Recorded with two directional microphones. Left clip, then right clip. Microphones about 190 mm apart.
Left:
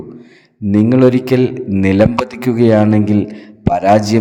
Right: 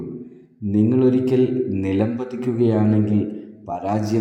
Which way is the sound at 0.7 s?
35° left (ahead or behind).